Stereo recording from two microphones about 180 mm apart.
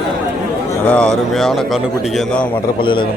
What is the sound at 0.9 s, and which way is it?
Speech, 5° left (ahead or behind).